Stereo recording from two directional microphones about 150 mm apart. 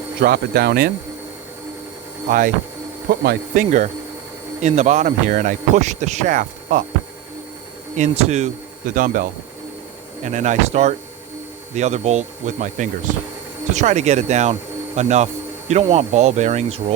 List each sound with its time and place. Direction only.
0.2 s speech: 90° right
3.1 s speech: 75° right (ahead or behind)
7.9 s speech: 50° right (ahead or behind)
8.9 s speech: 60° right (ahead or behind)
10.2 s speech: 50° right (ahead or behind)